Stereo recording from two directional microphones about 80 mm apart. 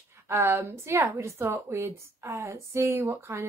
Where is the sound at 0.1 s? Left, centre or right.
Right.